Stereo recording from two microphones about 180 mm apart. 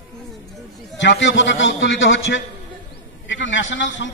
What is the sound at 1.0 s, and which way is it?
A man's voice, 90° left.